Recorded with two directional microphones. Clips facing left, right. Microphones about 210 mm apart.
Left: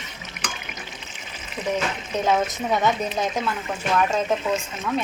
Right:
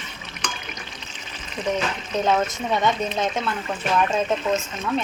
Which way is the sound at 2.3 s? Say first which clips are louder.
Left 1 dB; 10° left (ahead or behind).